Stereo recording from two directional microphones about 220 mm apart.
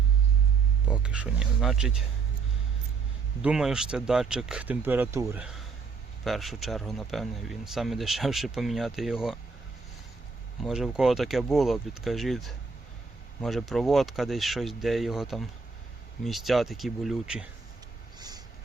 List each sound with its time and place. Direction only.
0.9 s speech: 5° right (ahead or behind)
3.4 s speech: 5° right (ahead or behind)
10.6 s speech: centre (ahead or behind)
18.2 s vehicle: 20° right (ahead or behind)